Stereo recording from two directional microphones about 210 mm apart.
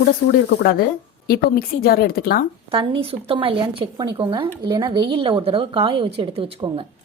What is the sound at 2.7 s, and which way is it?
Speech, 25° right (ahead or behind).